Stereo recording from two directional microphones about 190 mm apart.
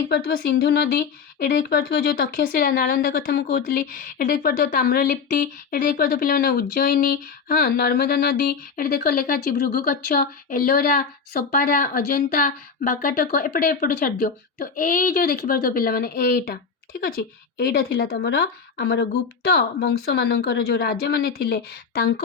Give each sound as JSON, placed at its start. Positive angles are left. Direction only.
{"t": 0.1, "sound": "speech", "side_deg": 55}